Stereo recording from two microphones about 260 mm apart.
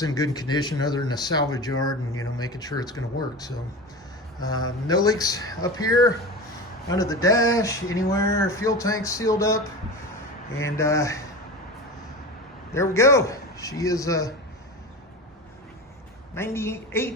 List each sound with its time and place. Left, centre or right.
0.0 s speech: centre
10.6 s speech: centre
12.7 s speech: centre
16.3 s speech: centre